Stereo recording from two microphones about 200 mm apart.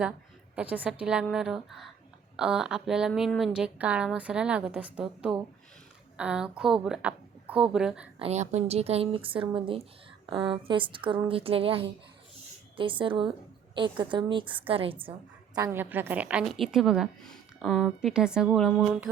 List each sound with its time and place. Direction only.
0.5 s a woman's voice: 5° right (ahead or behind)
8.2 s a woman's voice: 35° right (ahead or behind)
15.5 s a woman's voice: 15° right (ahead or behind)